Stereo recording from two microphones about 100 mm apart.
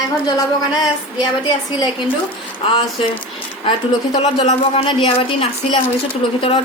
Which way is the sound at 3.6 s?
45° left (ahead or behind).